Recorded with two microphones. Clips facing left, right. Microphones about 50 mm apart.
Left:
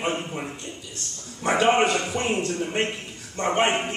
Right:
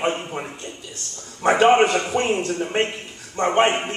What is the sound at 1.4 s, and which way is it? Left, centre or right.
A man's voice, right.